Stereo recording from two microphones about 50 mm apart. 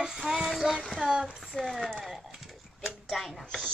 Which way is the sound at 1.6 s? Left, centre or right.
Centre.